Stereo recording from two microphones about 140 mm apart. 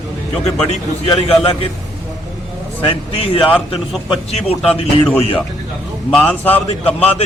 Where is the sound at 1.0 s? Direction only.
45° left (ahead or behind).